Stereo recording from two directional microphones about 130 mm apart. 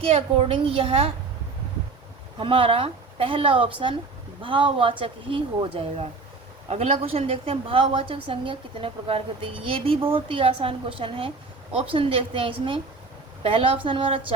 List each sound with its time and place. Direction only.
0.0 s a woman's voice: 50° right (ahead or behind)
2.4 s a woman's voice: 45° right (ahead or behind)